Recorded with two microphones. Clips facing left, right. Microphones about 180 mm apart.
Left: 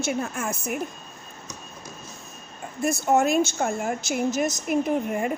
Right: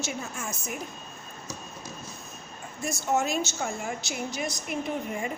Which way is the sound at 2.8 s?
55° left (ahead or behind).